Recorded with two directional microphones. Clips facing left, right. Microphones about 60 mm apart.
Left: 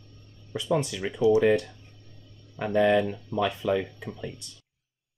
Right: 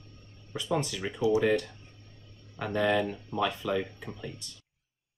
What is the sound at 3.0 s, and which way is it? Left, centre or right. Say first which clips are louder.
Speech: left 2 dB; right.